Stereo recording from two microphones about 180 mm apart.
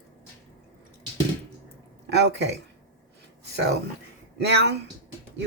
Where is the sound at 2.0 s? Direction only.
70° right (ahead or behind).